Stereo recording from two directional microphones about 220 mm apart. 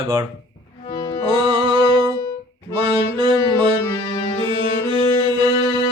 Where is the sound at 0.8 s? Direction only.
20° left (ahead or behind).